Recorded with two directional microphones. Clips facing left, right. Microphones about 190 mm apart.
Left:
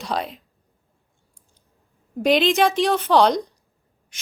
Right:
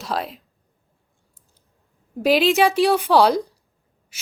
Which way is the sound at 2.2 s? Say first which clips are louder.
Right 1 dB; 5° right (ahead or behind).